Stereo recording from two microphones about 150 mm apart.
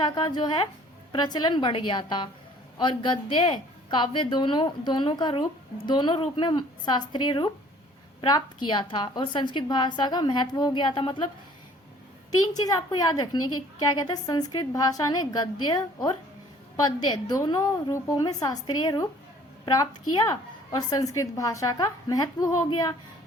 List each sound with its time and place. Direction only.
0.0 s a woman's voice: 30° left (ahead or behind)
12.3 s a woman's voice: 25° left (ahead or behind)